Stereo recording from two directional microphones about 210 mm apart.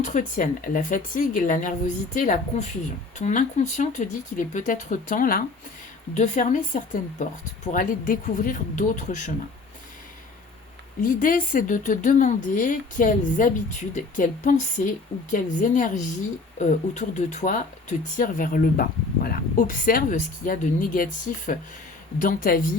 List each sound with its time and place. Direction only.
0.0 s speech: 35° left (ahead or behind)
11.0 s speech: 40° left (ahead or behind)